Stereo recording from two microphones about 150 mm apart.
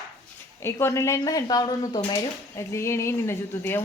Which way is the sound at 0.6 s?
15° left (ahead or behind).